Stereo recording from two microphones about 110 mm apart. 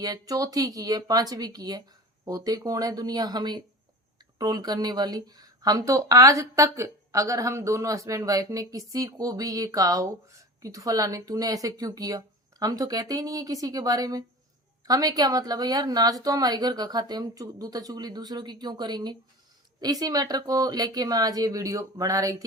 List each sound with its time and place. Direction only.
0.0 s speech: 35° right (ahead or behind)